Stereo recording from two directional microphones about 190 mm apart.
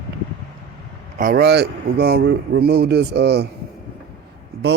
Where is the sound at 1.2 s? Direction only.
50° right (ahead or behind).